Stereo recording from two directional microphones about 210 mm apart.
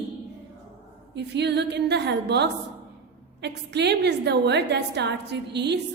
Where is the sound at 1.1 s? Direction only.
55° right (ahead or behind).